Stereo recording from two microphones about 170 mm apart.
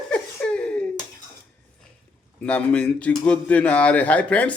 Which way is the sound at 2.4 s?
5° left (ahead or behind).